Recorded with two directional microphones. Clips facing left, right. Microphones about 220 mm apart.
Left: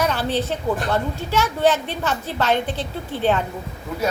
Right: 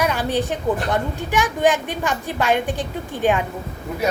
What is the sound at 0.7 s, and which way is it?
A woman's voice, 20° right (ahead or behind).